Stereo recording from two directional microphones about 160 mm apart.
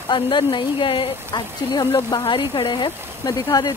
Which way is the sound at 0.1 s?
30° left (ahead or behind).